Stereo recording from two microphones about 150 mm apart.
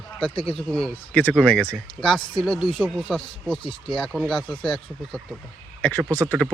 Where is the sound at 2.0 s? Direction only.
30° left (ahead or behind).